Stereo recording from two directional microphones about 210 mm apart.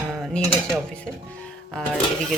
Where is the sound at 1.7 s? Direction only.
Centre (ahead or behind).